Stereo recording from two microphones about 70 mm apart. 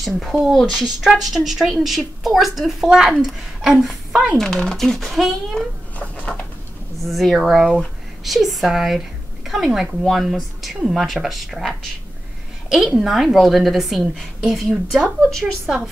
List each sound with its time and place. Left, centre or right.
0.0 s a woman's voice: centre
4.4 s a woman's voice: centre
5.9 s a sound: centre
7.1 s a woman's voice: centre